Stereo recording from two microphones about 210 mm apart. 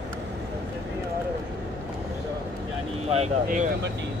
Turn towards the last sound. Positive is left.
turn(degrees=-35)  # may be behind; listen again after turning